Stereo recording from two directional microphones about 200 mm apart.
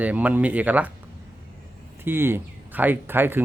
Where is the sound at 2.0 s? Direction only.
10° right (ahead or behind).